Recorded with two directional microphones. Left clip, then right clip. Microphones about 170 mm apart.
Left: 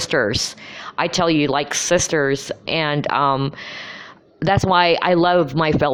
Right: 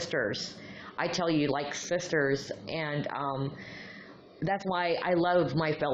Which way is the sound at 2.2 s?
35° left (ahead or behind).